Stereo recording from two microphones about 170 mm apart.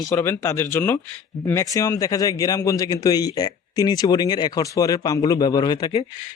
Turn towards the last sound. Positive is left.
turn(degrees=30)  # may be behind; listen again after turning